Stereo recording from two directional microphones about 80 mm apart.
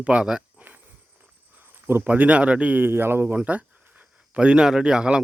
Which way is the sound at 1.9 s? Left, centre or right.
Right.